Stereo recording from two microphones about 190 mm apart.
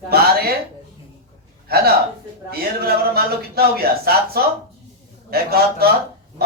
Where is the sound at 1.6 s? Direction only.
55° right (ahead or behind).